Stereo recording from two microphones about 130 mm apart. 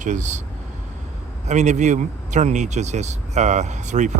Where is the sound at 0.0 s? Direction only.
70° right (ahead or behind).